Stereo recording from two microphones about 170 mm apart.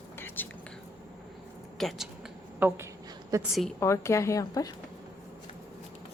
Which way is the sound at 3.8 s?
15° left (ahead or behind).